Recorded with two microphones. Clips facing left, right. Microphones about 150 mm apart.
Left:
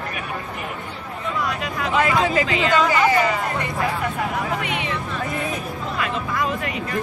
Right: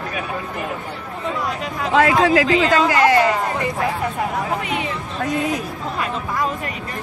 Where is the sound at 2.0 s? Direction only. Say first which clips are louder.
Right 5 dB; 85° right.